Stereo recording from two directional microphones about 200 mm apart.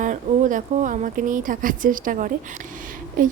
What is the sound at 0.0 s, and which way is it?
Speech, 40° right (ahead or behind).